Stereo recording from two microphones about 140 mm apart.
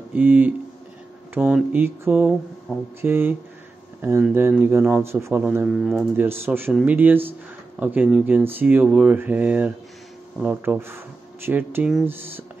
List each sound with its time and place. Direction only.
0.1 s speech: 15° right (ahead or behind)
5.7 s speech: centre (ahead or behind)
6.1 s speech: 15° right (ahead or behind)